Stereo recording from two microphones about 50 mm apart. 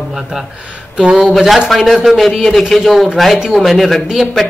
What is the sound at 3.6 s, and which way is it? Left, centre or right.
Speech, centre.